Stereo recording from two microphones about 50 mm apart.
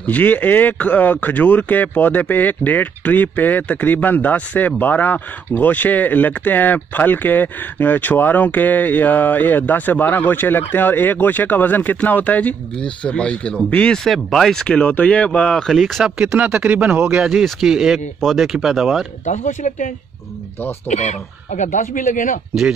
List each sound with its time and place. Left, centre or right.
0.0 s speech: left
12.7 s speech: left
13.9 s speech: centre
14.8 s speech: left
15.7 s speech: centre
16.3 s speech: right